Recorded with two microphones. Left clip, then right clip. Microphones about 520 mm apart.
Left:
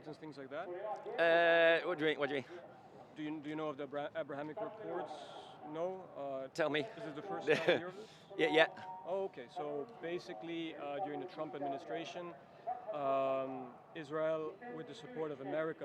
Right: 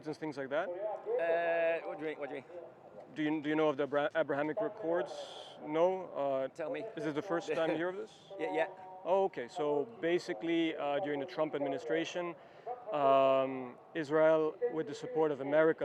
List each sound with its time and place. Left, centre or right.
0.0 s speech: right
0.9 s a man's voice: left
3.2 s speech: right
6.6 s a man's voice: left
7.0 s a man's voice: right
7.4 s a man's voice: left
9.0 s speech: right